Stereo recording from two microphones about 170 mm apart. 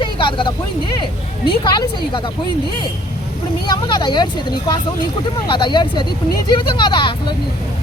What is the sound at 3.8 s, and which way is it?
Speech, 25° left (ahead or behind).